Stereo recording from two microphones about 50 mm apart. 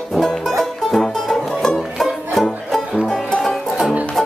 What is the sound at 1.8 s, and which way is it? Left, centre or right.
Music, centre.